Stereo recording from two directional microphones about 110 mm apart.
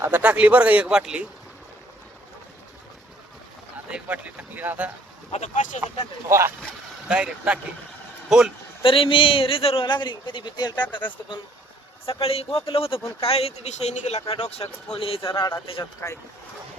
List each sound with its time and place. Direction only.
0.0 s speech: 15° right (ahead or behind)
3.8 s speech: 10° right (ahead or behind)
5.3 s speech: 80° left
6.2 s speech: 25° right (ahead or behind)
7.1 s a man's voice: 10° right (ahead or behind)
8.8 s a man's voice: 55° left (ahead or behind)
12.0 s speech: 60° left (ahead or behind)
13.0 s speech: 25° left (ahead or behind)
13.2 s speech: 65° left (ahead or behind); by 14.2 s 90° left
14.9 s speech: 55° left (ahead or behind)
15.8 s speech: 30° left (ahead or behind)